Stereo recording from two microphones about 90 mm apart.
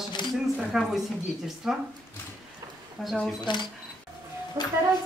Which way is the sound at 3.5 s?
60° left (ahead or behind).